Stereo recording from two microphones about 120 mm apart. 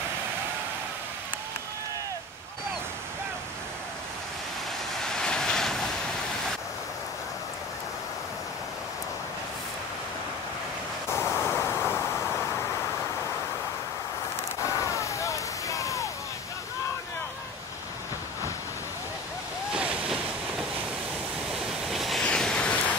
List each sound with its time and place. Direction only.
5.0 s vehicle: 5° left (ahead or behind)
11.1 s vehicle: 20° left (ahead or behind)
14.9 s a sound: 25° left (ahead or behind)
19.7 s waves: 10° right (ahead or behind)
21.8 s waves: centre (ahead or behind)